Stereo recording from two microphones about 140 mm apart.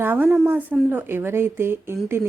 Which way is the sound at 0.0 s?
15° right (ahead or behind).